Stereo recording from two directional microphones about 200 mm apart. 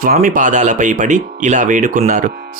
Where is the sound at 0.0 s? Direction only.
45° right (ahead or behind).